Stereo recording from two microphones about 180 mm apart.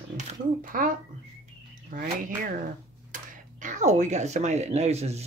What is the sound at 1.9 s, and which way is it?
Speech, 45° right (ahead or behind).